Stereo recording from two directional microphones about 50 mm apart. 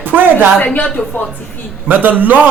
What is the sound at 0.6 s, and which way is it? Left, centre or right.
Speech, left.